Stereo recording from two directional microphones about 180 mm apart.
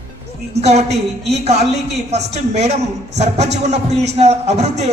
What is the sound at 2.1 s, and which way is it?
A man's voice, 40° right (ahead or behind).